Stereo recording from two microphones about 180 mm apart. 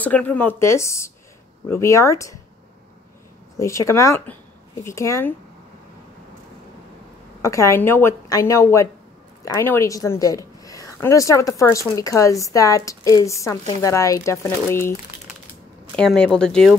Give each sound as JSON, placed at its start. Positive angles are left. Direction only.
{"t": 0.0, "sound": "a woman's voice", "side_deg": 10}
{"t": 3.5, "sound": "a woman's voice", "side_deg": 15}
{"t": 7.4, "sound": "a woman's voice", "side_deg": 15}
{"t": 16.0, "sound": "speech", "side_deg": 5}